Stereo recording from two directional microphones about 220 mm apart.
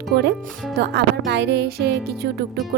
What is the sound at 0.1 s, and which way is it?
Speech, 50° right (ahead or behind).